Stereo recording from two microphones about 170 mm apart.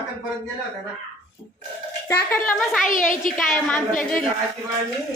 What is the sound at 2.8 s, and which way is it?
Speech, 50° left (ahead or behind).